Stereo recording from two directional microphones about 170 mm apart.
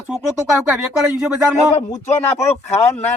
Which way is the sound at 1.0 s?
5° right (ahead or behind).